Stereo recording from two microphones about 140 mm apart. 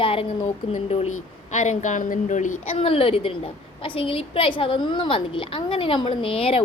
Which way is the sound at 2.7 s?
45° left (ahead or behind).